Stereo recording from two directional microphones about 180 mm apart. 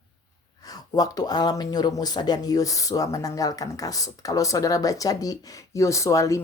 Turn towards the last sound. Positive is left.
turn(degrees=15)  # may be behind; listen again after turning